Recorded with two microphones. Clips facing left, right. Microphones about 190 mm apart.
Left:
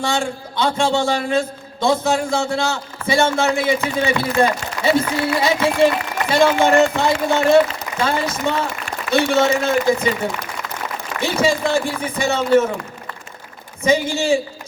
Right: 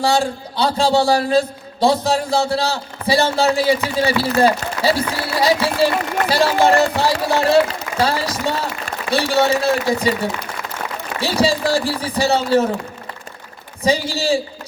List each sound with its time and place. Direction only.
0.0 s a man's voice: 35° right (ahead or behind)
11.2 s a man's voice: 35° right (ahead or behind)
13.8 s a man's voice: 35° right (ahead or behind)